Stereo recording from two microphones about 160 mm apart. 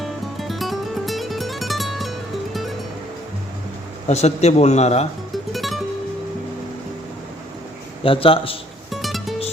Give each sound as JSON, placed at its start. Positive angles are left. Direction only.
{"t": 0.0, "sound": "music", "side_deg": 0}
{"t": 4.1, "sound": "a man's voice", "side_deg": 45}
{"t": 5.5, "sound": "music", "side_deg": 0}
{"t": 8.0, "sound": "a man's voice", "side_deg": 35}
{"t": 8.9, "sound": "music", "side_deg": 0}